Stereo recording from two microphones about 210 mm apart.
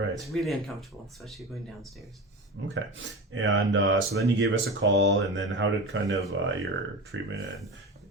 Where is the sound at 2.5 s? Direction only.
55° right (ahead or behind).